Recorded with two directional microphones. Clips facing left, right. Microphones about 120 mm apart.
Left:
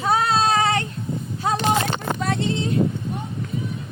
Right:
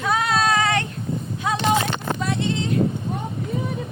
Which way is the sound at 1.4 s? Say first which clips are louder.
Left 1 dB; 35° left (ahead or behind).